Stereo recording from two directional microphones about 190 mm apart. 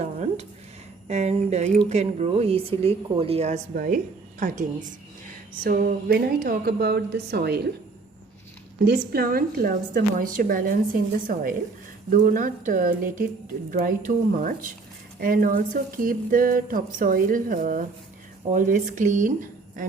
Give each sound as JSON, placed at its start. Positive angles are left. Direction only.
{"t": 0.0, "sound": "a sound", "side_deg": -35}
{"t": 1.0, "sound": "speech", "side_deg": -35}
{"t": 8.8, "sound": "speech", "side_deg": -60}